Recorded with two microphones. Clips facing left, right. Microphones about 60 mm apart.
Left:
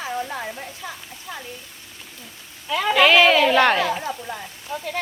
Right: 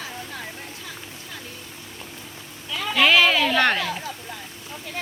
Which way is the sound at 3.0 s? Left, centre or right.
Centre.